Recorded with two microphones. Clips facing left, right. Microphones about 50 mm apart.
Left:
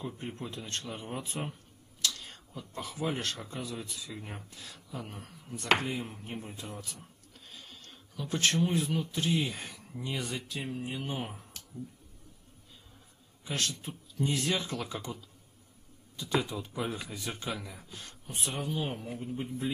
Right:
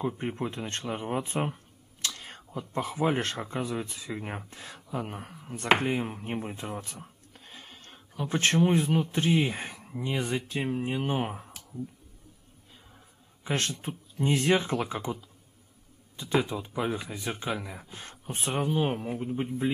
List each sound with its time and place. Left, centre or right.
0.0 s speech: right
13.4 s speech: right
16.2 s speech: right